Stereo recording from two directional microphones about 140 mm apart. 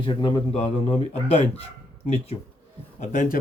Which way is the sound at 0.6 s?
45° left (ahead or behind).